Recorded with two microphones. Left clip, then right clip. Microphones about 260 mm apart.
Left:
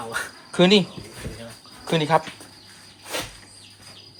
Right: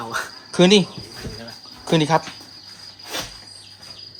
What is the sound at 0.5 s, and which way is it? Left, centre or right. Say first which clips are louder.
Speech: right 2 dB; centre.